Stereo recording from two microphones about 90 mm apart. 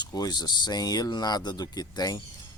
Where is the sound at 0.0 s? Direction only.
45° left (ahead or behind).